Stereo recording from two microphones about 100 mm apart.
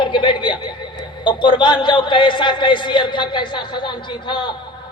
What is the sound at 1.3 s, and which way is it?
A man's voice, 55° left (ahead or behind).